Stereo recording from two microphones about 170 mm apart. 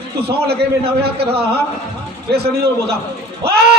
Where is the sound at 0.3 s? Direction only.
70° right (ahead or behind).